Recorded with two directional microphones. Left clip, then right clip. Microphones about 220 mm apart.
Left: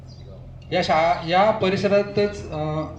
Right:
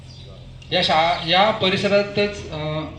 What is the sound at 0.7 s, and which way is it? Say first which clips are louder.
Speech: right 1 dB; centre (ahead or behind).